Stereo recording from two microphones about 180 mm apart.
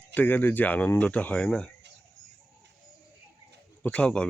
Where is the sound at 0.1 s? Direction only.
10° left (ahead or behind).